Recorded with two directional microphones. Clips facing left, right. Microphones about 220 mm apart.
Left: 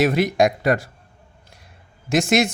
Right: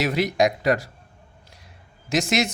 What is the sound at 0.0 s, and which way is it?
Speech, 50° left (ahead or behind).